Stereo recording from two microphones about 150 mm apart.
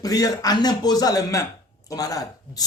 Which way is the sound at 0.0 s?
25° left (ahead or behind).